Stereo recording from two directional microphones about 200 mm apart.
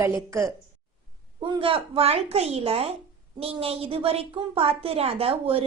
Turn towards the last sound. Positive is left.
turn(degrees=-30)  # may be behind; listen again after turning